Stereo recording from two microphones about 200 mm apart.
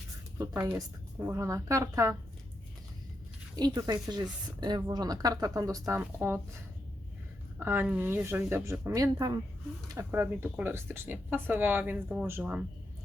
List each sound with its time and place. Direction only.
0.3 s speech: 10° right (ahead or behind)
3.5 s speech: 20° right (ahead or behind)
7.6 s speech: 10° right (ahead or behind)